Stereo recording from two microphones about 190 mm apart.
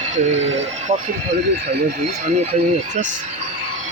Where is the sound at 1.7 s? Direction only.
60° right (ahead or behind).